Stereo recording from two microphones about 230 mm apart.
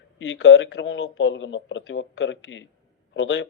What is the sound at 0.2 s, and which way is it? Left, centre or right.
Speech, left.